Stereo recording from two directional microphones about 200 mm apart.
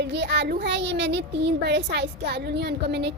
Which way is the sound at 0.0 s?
60° right (ahead or behind).